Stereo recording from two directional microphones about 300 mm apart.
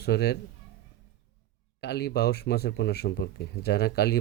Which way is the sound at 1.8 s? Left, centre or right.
Left.